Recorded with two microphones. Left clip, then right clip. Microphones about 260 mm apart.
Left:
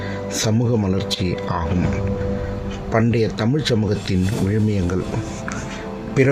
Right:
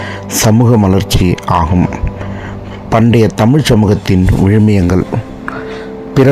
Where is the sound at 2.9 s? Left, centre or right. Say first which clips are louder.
Right 9 dB; right.